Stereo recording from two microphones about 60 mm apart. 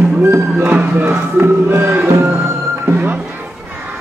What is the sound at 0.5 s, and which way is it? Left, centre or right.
Music, right.